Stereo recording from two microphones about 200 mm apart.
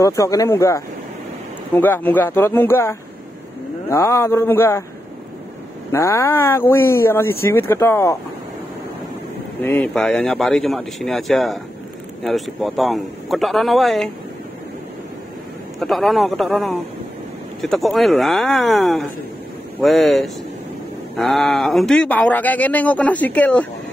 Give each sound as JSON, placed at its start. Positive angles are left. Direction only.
{"t": 0.0, "sound": "speech", "side_deg": 15}
{"t": 5.9, "sound": "speech", "side_deg": 15}
{"t": 9.6, "sound": "speech", "side_deg": 10}
{"t": 15.8, "sound": "speech", "side_deg": 0}